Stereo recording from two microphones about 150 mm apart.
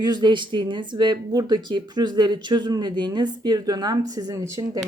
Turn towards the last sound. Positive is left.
turn(degrees=-20)  # may be behind; listen again after turning